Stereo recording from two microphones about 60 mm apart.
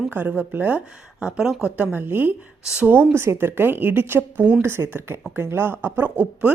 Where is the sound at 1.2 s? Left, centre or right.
Centre.